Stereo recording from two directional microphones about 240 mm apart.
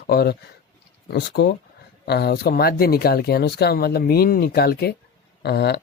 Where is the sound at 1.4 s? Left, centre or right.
Left.